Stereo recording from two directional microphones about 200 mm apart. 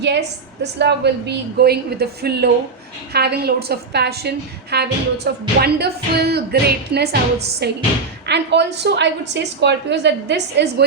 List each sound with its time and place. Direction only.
0.0 s a woman's voice: 60° right (ahead or behind)